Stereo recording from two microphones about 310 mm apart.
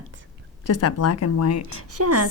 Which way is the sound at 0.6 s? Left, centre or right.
Left.